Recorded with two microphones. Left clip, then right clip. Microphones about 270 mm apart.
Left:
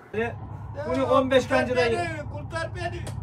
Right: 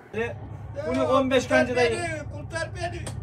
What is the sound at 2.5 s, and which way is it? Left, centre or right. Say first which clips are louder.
Vehicle: even; left.